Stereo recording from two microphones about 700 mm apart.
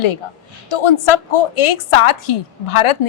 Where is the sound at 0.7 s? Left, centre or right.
Left.